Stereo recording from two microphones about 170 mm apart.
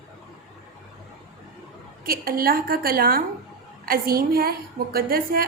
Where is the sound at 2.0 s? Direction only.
60° right (ahead or behind).